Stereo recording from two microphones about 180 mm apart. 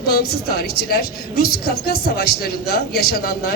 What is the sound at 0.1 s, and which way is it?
A woman's voice, 60° left (ahead or behind).